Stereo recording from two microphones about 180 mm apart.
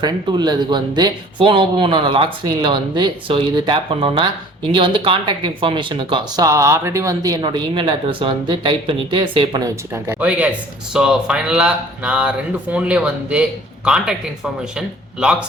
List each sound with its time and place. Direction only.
0.0 s speech: 25° right (ahead or behind); by 15.4 s 5° right (ahead or behind)